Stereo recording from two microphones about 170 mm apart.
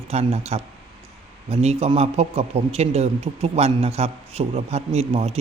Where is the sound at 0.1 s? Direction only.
40° right (ahead or behind).